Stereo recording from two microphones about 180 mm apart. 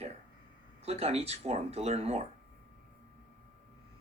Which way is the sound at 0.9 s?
35° right (ahead or behind).